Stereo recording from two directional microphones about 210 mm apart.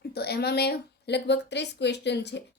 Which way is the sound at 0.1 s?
50° left (ahead or behind).